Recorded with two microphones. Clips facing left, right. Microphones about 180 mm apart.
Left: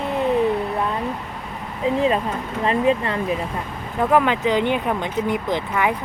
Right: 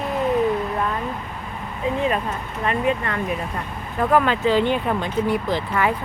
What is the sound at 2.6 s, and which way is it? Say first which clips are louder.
Speech: left 3 dB; 30° left (ahead or behind).